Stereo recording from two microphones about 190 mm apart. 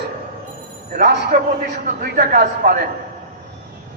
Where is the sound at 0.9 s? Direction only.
55° right (ahead or behind).